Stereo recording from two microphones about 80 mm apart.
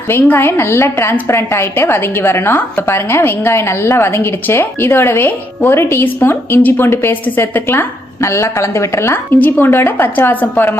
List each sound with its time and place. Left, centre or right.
0.1 s a woman's voice: left